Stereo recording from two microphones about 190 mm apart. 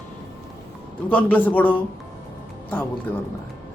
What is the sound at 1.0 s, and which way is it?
Speech, 10° left (ahead or behind).